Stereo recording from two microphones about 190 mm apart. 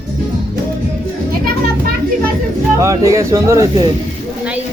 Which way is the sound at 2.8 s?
15° right (ahead or behind).